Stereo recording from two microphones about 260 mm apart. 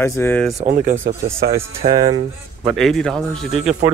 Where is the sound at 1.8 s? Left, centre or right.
Centre.